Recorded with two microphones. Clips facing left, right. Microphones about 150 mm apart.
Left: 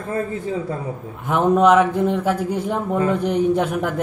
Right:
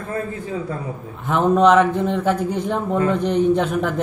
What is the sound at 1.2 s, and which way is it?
Speech, 10° left (ahead or behind).